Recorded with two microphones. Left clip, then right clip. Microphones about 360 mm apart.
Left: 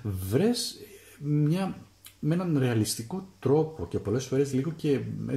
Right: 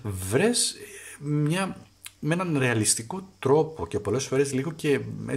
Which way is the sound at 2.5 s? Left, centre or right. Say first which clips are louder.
Right 4 dB; right.